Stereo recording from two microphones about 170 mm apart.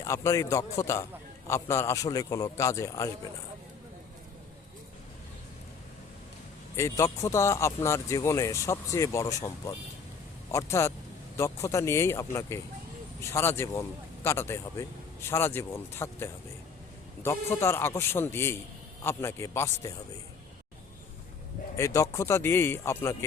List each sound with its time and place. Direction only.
0.0 s a man's voice: 20° left (ahead or behind)
6.7 s speech: 15° left (ahead or behind)
21.8 s speech: 20° left (ahead or behind)